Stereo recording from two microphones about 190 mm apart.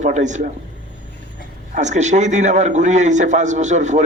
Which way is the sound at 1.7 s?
40° right (ahead or behind).